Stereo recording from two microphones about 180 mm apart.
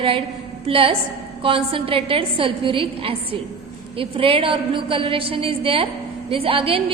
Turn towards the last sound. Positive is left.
turn(degrees=-30)  # may be behind; listen again after turning